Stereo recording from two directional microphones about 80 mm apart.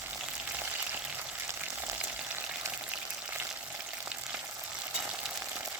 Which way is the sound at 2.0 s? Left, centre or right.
Centre.